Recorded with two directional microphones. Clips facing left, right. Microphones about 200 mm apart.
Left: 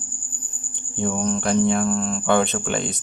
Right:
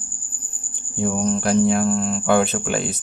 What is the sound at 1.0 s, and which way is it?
Speech, 5° right (ahead or behind).